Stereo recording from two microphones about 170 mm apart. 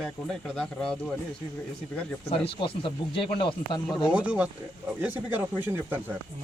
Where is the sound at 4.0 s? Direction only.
5° right (ahead or behind).